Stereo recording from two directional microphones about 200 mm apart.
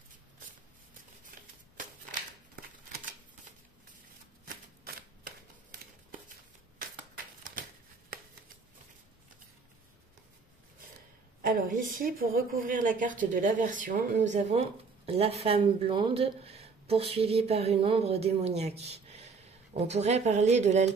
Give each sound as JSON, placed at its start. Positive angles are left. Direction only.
{"t": 11.4, "sound": "a woman's voice", "side_deg": -45}